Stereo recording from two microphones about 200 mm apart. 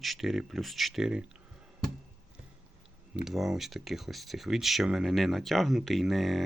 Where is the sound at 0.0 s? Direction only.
Centre (ahead or behind).